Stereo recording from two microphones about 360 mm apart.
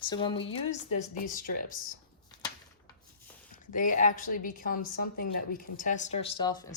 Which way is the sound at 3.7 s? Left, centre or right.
Left.